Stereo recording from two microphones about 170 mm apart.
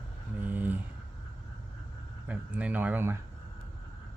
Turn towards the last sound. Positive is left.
turn(degrees=-15)  # may be behind; listen again after turning